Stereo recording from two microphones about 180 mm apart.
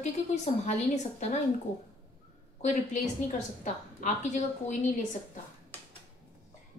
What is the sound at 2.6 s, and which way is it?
A woman's voice, 40° left (ahead or behind).